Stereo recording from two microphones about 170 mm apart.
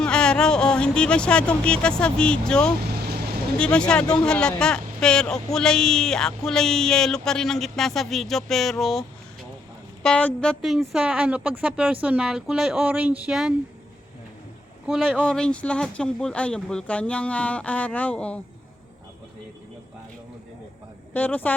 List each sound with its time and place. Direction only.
0.0 s speech: 5° left (ahead or behind)
2.8 s vehicle: 70° right (ahead or behind)
3.6 s speech: 5° left (ahead or behind)
14.8 s speech: centre (ahead or behind)
21.1 s speech: 10° left (ahead or behind)